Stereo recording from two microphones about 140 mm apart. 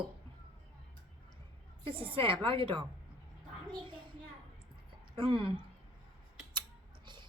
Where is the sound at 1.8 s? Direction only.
40° right (ahead or behind).